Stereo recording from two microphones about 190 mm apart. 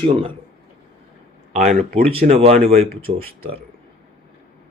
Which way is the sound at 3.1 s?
50° right (ahead or behind).